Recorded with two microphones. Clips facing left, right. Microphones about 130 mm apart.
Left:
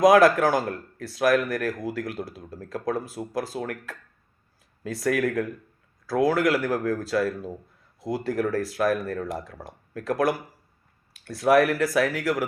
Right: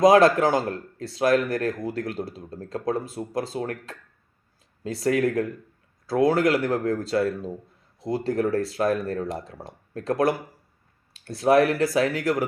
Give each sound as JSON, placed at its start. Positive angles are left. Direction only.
{"t": 0.0, "sound": "speech", "side_deg": -25}